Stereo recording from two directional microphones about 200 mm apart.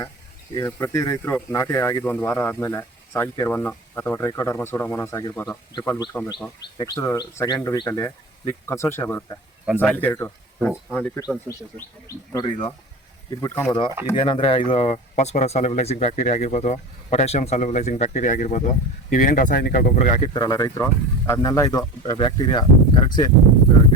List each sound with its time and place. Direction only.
0.5 s speech: 15° left (ahead or behind)
12.3 s speech: 20° left (ahead or behind)
20.3 s speech: 15° left (ahead or behind)